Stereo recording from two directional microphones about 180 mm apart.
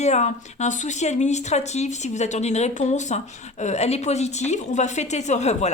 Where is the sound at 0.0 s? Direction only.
40° left (ahead or behind).